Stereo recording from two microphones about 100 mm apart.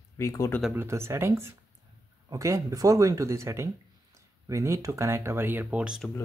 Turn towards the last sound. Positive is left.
turn(degrees=-10)  # may be behind; listen again after turning